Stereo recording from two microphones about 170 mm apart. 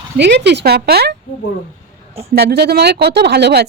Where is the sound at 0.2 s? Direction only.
90° right; by 1.1 s 70° right (ahead or behind).